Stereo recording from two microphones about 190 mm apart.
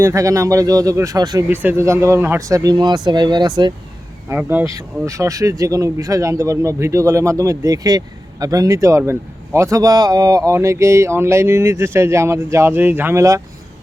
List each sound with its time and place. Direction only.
0.0 s speech: 15° right (ahead or behind)
4.3 s speech: 10° right (ahead or behind)